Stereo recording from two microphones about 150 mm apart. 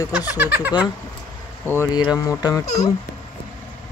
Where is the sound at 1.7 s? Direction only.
15° left (ahead or behind).